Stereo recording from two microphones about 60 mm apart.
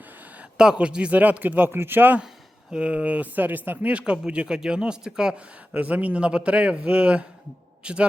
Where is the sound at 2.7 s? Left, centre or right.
Right.